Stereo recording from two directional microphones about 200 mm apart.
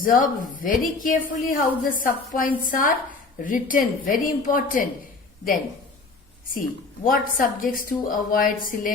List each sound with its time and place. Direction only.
0.0 s a woman's voice: 45° left (ahead or behind)
6.5 s a woman's voice: 45° left (ahead or behind)